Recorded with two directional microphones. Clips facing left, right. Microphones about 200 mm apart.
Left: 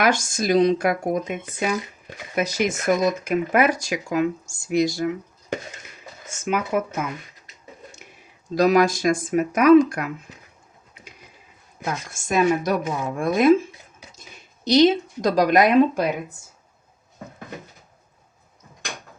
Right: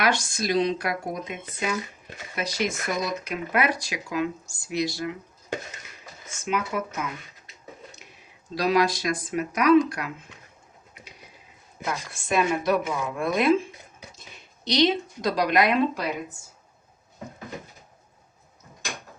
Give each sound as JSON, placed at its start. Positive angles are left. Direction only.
{"t": 0.0, "sound": "speech", "side_deg": 45}
{"t": 6.4, "sound": "speech", "side_deg": 50}
{"t": 8.5, "sound": "speech", "side_deg": 45}
{"t": 12.1, "sound": "speech", "side_deg": 45}